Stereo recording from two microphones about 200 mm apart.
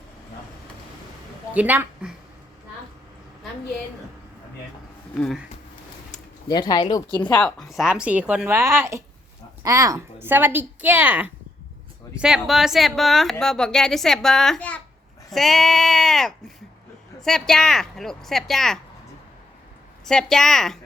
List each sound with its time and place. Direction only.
1.5 s speech: 10° right (ahead or behind)
5.1 s speech: centre (ahead or behind)
6.5 s speech: 20° left (ahead or behind)
7.3 s speech: 5° left (ahead or behind)
15.3 s sheep: centre (ahead or behind)
17.2 s speech: 5° left (ahead or behind)
20.1 s speech: centre (ahead or behind)